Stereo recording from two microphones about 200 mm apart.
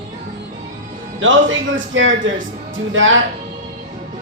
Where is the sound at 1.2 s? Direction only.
70° right (ahead or behind).